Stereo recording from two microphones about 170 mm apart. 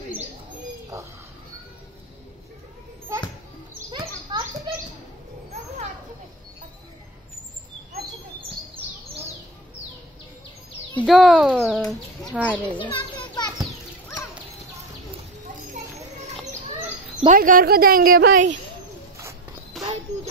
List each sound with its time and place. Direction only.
3.1 s children playing: 20° right (ahead or behind)
3.9 s children playing: 30° right (ahead or behind)
11.1 s speech: centre (ahead or behind)
11.5 s bird: 10° right (ahead or behind)
11.8 s speech: 5° left (ahead or behind)
12.9 s children playing: 25° left (ahead or behind)
17.3 s a woman's voice: 55° right (ahead or behind)
19.7 s a sound: centre (ahead or behind)